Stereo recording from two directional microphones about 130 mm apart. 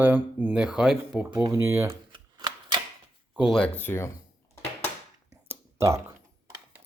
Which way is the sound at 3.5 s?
10° left (ahead or behind).